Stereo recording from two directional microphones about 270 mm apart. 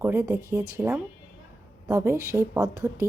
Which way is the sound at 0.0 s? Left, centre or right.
Centre.